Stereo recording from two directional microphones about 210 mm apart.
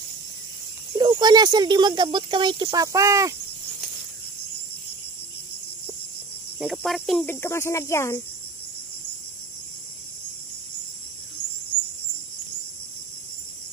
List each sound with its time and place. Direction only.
0.9 s speech: 20° right (ahead or behind)
6.6 s speech: centre (ahead or behind)